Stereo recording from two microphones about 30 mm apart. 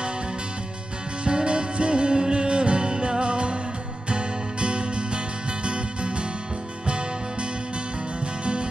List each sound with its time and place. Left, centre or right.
1.2 s music: right